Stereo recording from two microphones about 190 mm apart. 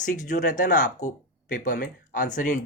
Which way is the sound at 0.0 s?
40° left (ahead or behind).